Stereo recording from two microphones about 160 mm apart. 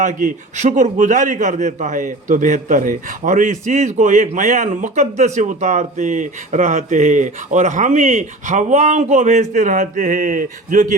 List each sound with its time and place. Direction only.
0.0 s a man's voice: 55° right (ahead or behind)